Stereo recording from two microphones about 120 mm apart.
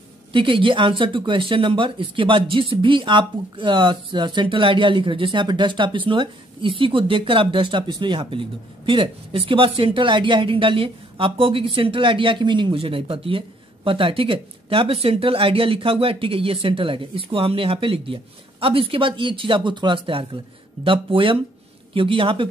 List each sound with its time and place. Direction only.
0.3 s speech: 45° right (ahead or behind)